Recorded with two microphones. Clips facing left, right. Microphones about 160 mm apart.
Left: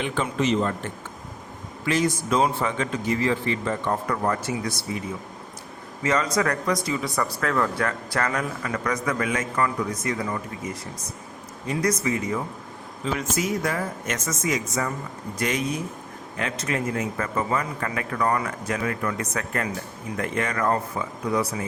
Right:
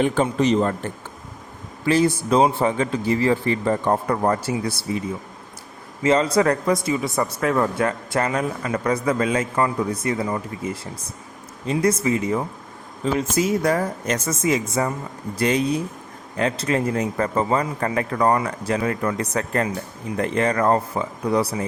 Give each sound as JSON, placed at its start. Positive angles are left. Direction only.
{"t": 0.0, "sound": "a man's voice", "side_deg": -40}
{"t": 6.0, "sound": "a man's voice", "side_deg": -25}